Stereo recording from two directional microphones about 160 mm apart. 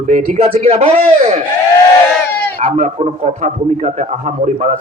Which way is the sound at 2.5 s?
40° right (ahead or behind).